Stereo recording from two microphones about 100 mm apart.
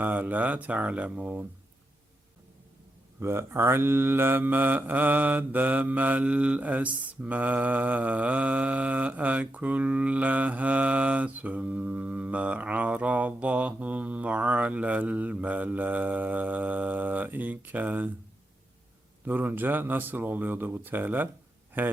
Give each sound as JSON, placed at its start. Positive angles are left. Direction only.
{"t": 0.0, "sound": "mantra", "side_deg": -15}
{"t": 3.2, "sound": "mantra", "side_deg": -25}
{"t": 19.2, "sound": "speech", "side_deg": -20}